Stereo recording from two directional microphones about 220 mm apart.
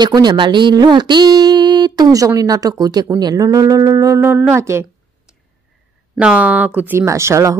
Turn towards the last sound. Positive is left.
turn(degrees=-15)  # may be behind; listen again after turning